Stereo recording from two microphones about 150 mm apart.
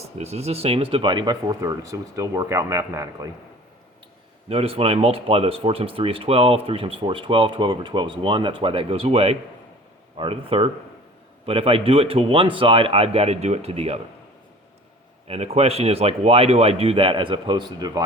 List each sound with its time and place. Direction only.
0.2 s speech: 45° right (ahead or behind); by 3.2 s 20° right (ahead or behind)
4.4 s speech: 40° right (ahead or behind)
15.3 s speech: 40° right (ahead or behind); by 18.0 s 25° right (ahead or behind)